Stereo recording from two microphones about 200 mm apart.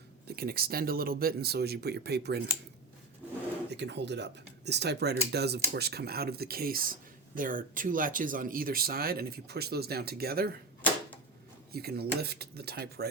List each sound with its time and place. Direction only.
0.3 s speech: 50° right (ahead or behind)
3.7 s speech: 60° right (ahead or behind)
11.7 s speech: 50° right (ahead or behind)